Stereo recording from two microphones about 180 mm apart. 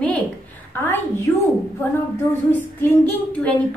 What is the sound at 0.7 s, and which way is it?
Speech, 10° left (ahead or behind).